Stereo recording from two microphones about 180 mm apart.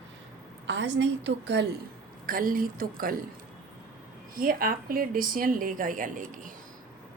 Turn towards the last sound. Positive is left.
turn(degrees=-45)  # may be behind; listen again after turning